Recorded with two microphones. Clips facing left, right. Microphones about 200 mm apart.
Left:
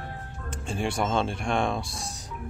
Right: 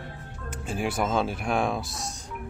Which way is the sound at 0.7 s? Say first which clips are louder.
Even; 5° right (ahead or behind).